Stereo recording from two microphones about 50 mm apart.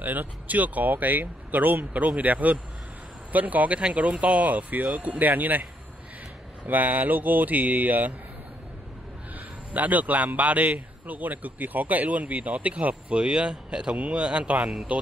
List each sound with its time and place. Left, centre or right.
0.0 s a man's voice: right
6.7 s a man's voice: right
9.8 s a man's voice: right